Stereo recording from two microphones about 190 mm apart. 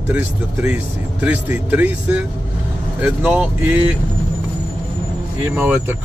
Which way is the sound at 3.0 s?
5° right (ahead or behind).